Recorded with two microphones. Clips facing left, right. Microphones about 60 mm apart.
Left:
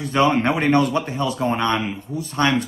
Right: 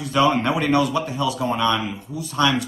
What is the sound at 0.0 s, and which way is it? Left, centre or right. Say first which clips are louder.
Speech: left 1 dB; left.